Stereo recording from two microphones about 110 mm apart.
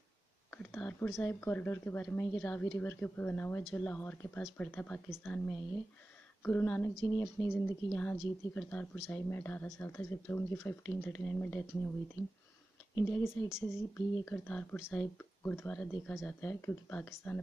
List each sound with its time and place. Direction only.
0.5 s speech: 10° left (ahead or behind)
6.4 s speech: 20° left (ahead or behind)
12.9 s speech: 25° left (ahead or behind)